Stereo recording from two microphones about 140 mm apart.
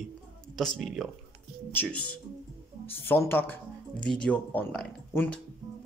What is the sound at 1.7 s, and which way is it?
Speech, 10° left (ahead or behind).